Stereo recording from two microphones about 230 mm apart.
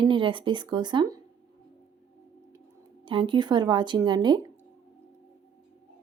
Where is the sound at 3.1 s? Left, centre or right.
Right.